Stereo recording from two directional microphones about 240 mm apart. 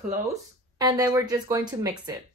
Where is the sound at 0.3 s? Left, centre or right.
Centre.